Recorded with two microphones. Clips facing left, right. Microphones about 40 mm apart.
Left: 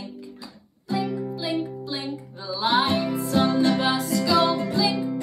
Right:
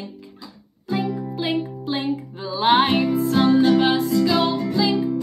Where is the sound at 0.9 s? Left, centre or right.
Right.